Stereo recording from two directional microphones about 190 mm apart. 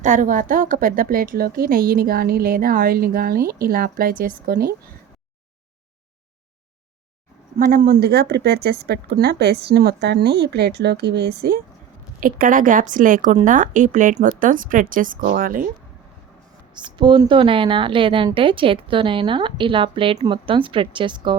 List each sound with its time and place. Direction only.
0.0 s a woman's voice: 40° right (ahead or behind)
7.6 s a woman's voice: 45° right (ahead or behind)
16.7 s a woman's voice: 25° right (ahead or behind)